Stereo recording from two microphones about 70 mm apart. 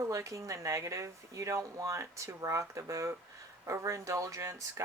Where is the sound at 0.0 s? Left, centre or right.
Right.